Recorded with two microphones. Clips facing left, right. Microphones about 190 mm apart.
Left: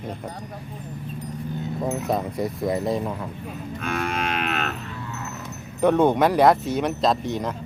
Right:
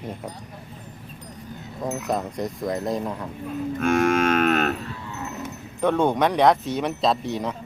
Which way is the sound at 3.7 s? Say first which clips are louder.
Right 8 dB; 45° right (ahead or behind).